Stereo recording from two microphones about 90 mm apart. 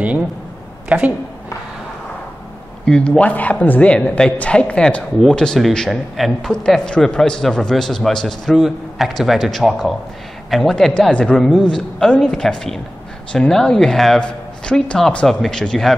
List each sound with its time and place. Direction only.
0.8 s speech: 15° right (ahead or behind)
2.8 s a man's voice: 10° left (ahead or behind)